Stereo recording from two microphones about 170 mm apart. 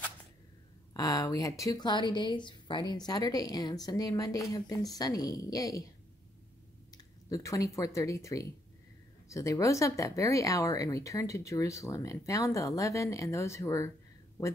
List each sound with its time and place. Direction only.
0.9 s speech: 20° left (ahead or behind)
7.2 s speech: 20° left (ahead or behind)